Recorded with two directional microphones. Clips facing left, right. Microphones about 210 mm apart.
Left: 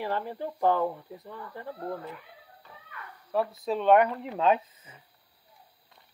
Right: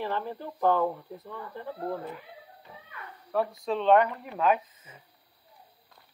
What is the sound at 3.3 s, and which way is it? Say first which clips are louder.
Speech: even; 5° left (ahead or behind).